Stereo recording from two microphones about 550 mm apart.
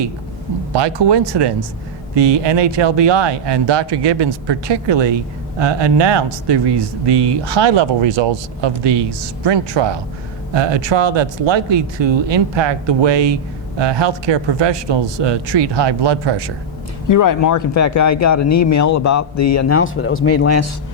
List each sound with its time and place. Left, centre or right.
0.7 s speech: right
17.1 s speech: left